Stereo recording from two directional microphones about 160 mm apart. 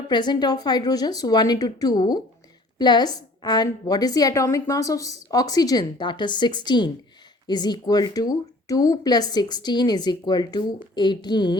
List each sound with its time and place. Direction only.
0.1 s a woman's voice: 25° left (ahead or behind)